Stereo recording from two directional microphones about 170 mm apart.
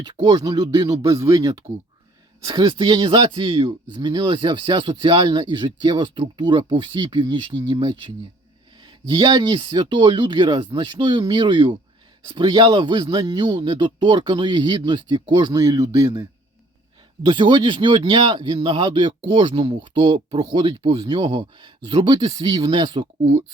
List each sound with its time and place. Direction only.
0.0 s speech: 25° right (ahead or behind)
17.2 s speech: 30° right (ahead or behind)